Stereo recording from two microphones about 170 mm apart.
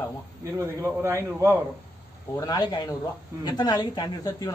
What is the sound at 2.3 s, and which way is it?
A man's voice, 25° left (ahead or behind).